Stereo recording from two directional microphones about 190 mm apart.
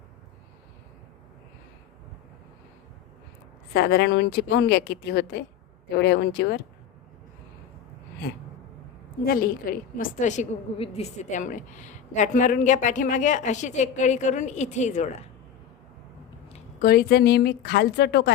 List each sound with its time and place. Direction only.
3.7 s a woman's voice: 55° left (ahead or behind)
9.2 s a woman's voice: 50° left (ahead or behind)
16.8 s a woman's voice: 55° left (ahead or behind)